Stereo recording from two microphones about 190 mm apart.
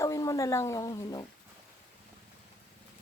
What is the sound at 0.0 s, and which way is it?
A woman's voice, 15° left (ahead or behind).